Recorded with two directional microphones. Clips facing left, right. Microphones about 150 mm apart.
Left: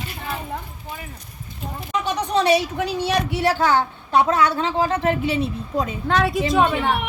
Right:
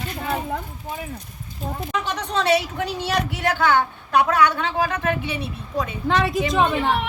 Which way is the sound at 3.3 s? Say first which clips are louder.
Even; 30° left (ahead or behind).